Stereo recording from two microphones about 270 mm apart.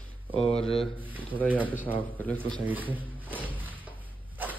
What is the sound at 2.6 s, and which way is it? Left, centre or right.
Drawer open or close, centre.